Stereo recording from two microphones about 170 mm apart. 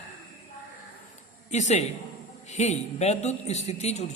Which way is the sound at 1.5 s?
40° left (ahead or behind).